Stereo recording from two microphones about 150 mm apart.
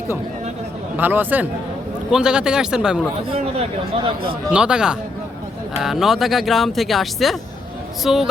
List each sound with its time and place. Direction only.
0.9 s speech: 10° right (ahead or behind)
3.2 s speech: 40° right (ahead or behind)
4.5 s speech: 5° right (ahead or behind)